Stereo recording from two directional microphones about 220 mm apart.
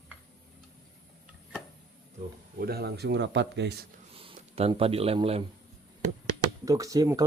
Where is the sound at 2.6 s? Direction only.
45° right (ahead or behind).